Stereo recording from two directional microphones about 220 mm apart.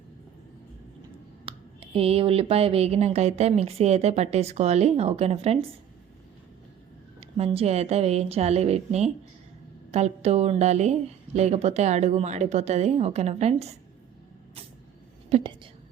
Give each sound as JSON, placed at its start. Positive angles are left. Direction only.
{"t": 1.5, "sound": "speech", "side_deg": -25}
{"t": 7.2, "sound": "speech", "side_deg": -25}
{"t": 15.3, "sound": "a woman's voice", "side_deg": -25}